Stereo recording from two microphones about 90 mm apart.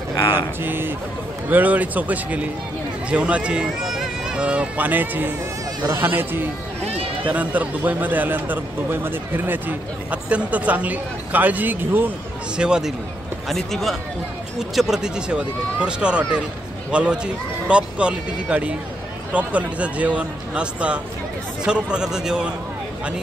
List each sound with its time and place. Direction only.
0.6 s speech: 25° right (ahead or behind)
12.5 s speech: 10° right (ahead or behind)
13.5 s speech: 5° left (ahead or behind)